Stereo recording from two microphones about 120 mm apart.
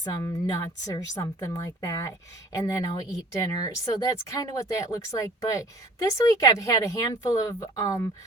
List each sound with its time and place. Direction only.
0.0 s a woman's voice: 30° left (ahead or behind)